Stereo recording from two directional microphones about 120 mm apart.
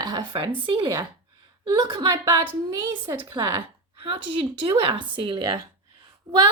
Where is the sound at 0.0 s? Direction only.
40° right (ahead or behind).